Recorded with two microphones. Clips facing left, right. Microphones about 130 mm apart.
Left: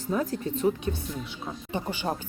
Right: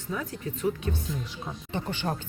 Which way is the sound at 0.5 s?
25° left (ahead or behind).